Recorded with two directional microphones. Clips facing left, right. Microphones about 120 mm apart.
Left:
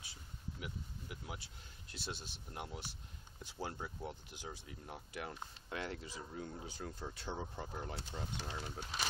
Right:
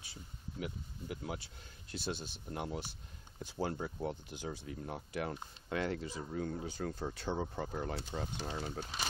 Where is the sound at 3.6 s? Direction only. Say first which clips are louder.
Right 7 dB; 55° right (ahead or behind).